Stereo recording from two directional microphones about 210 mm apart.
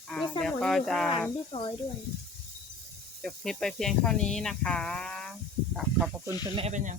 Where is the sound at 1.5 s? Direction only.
25° left (ahead or behind).